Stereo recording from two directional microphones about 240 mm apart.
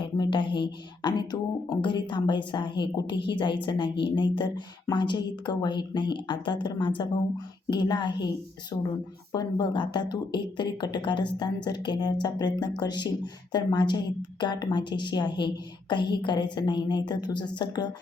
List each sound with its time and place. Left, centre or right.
0.0 s speech: centre